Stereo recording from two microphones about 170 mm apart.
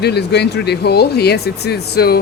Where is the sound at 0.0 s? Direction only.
75° left (ahead or behind).